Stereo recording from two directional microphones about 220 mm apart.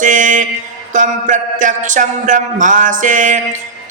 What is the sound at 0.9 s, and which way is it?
Music, 35° right (ahead or behind).